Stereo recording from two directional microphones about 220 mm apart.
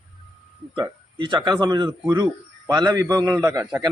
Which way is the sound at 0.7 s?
20° right (ahead or behind).